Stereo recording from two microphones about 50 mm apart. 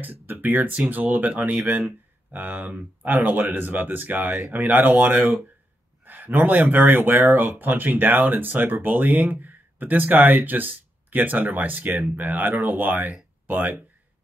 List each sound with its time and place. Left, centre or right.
0.0 s speech: right